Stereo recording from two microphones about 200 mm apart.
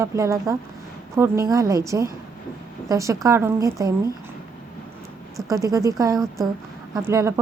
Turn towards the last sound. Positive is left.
turn(degrees=-15)  # may be behind; listen again after turning